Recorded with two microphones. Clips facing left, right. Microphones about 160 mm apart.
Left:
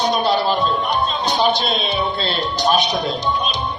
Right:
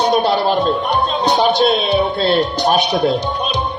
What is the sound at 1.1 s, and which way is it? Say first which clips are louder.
A man's voice: right 5 dB; 70° right (ahead or behind).